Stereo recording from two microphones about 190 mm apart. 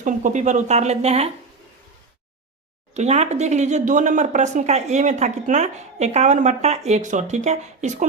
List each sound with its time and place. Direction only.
0.0 s speech: 40° right (ahead or behind)
2.9 s speech: 35° right (ahead or behind)